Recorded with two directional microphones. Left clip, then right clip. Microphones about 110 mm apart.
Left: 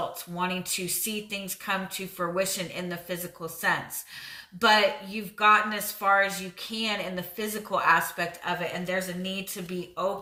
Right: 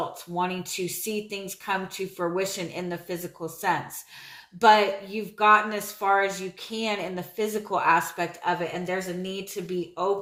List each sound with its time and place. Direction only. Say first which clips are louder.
0.3 s speech: right 2 dB; 30° right (ahead or behind)